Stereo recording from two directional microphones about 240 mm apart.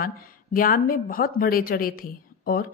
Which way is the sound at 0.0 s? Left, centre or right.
Left.